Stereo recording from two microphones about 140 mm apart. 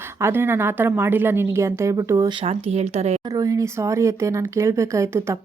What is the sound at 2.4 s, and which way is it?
Speech, 45° right (ahead or behind).